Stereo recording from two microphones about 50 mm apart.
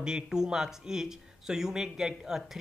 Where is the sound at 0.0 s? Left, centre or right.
Centre.